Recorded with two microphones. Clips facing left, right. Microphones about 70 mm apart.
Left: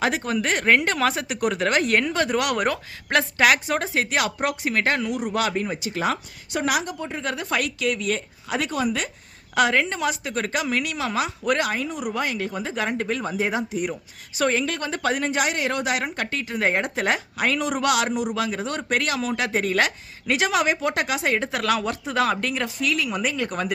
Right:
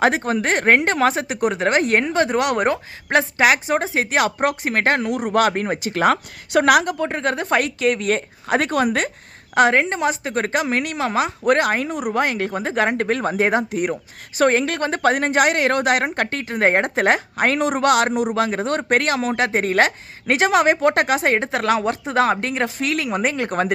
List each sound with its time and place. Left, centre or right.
0.0 s speech: right
9.6 s a woman's voice: right